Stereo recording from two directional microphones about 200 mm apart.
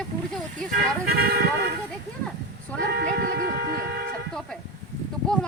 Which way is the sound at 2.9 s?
50° right (ahead or behind).